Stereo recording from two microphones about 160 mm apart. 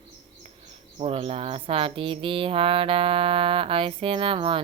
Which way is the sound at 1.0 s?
35° right (ahead or behind).